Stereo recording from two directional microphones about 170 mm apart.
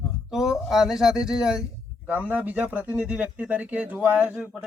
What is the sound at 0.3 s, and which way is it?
Speech, centre (ahead or behind).